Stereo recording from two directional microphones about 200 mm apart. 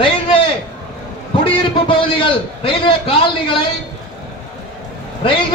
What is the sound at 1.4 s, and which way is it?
A man's voice, 25° left (ahead or behind).